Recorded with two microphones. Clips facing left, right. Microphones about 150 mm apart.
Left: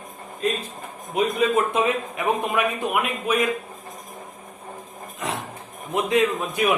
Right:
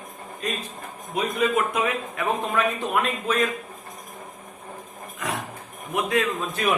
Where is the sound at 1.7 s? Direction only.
20° left (ahead or behind).